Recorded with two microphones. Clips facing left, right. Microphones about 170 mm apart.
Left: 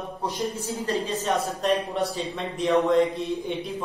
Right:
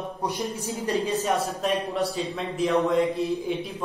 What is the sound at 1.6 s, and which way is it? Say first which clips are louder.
Speech: left 1 dB; centre (ahead or behind).